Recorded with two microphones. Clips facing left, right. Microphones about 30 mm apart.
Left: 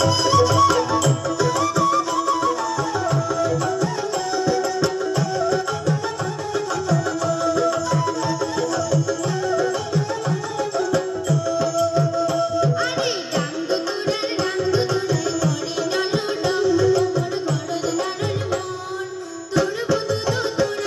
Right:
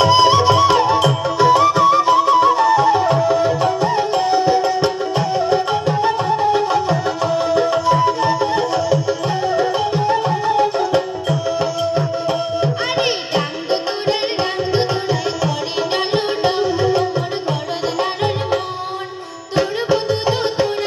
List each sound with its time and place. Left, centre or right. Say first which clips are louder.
0.0 s music: right 6 dB; right
19.5 s music: right 3 dB; right